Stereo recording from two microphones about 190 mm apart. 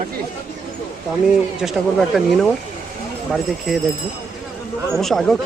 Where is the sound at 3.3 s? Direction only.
Centre (ahead or behind).